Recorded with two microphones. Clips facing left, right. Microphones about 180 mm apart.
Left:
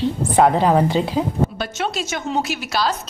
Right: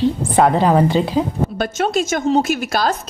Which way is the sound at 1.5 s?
50° right (ahead or behind).